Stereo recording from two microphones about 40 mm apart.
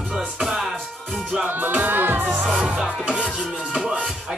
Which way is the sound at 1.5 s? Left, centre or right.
Right.